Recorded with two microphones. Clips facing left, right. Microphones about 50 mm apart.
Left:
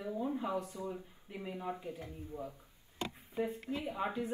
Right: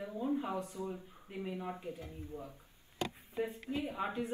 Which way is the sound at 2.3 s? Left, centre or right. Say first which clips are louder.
Left 3 dB; left.